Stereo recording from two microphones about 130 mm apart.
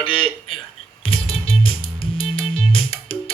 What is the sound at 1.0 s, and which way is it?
Music, 45° left (ahead or behind).